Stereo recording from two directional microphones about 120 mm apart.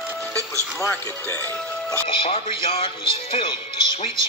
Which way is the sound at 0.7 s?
20° left (ahead or behind).